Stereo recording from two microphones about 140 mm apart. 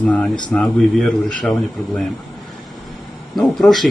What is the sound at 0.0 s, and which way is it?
Speech, 10° left (ahead or behind).